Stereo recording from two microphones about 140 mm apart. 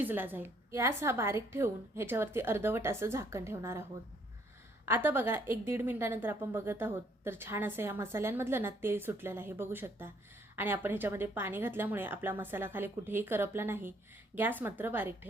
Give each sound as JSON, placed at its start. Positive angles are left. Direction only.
{"t": 0.0, "sound": "a woman's voice", "side_deg": -15}
{"t": 4.9, "sound": "a woman's voice", "side_deg": -15}